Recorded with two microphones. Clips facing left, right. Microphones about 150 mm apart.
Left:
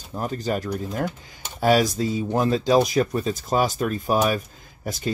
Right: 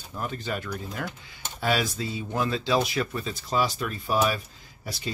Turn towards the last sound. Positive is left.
turn(degrees=45)  # may be behind; listen again after turning